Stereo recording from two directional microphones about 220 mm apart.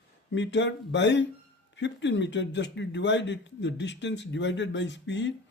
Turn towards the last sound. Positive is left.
turn(degrees=55)  # may be behind; listen again after turning